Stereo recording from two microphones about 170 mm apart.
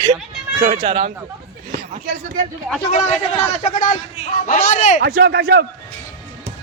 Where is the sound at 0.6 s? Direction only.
45° right (ahead or behind).